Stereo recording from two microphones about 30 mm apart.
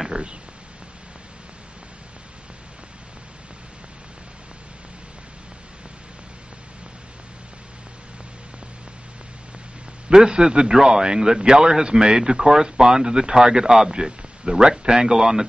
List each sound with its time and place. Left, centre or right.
0.1 s a sound: right
10.1 s speech: right
13.8 s speech: right; by 15.4 s centre